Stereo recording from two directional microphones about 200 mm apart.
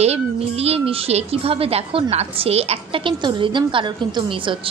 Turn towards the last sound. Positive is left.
turn(degrees=-25)  # may be behind; listen again after turning